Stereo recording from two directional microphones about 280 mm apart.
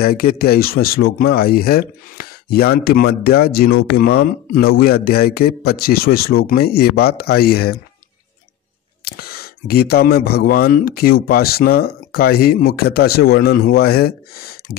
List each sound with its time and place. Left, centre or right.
0.0 s speech: left
9.0 s speech: left